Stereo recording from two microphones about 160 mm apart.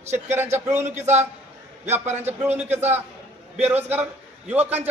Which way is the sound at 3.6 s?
10° right (ahead or behind).